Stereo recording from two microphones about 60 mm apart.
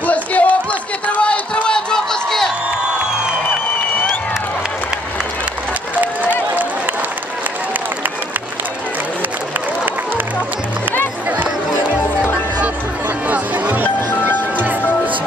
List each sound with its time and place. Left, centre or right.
0.0 s run: left
1.0 s crowd: left
13.3 s music: right
13.9 s music: left